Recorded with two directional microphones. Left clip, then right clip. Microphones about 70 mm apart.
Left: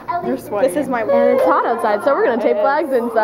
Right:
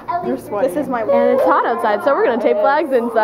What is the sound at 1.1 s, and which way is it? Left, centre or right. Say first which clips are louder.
A woman's voice: even; centre.